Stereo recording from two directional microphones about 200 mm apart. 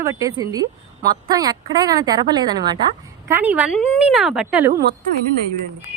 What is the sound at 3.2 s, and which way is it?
Speech, 10° right (ahead or behind).